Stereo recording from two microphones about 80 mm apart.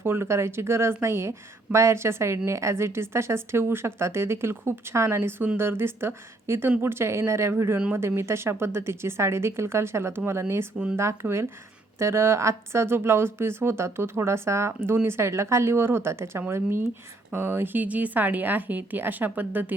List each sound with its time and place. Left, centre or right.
0.0 s a woman's voice: right